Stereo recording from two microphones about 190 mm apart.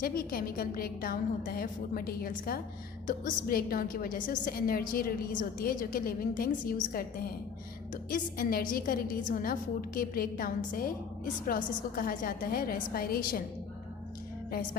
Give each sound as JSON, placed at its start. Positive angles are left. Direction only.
{"t": 0.0, "sound": "a woman's voice", "side_deg": 50}